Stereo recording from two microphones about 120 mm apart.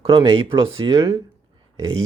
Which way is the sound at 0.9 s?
25° right (ahead or behind).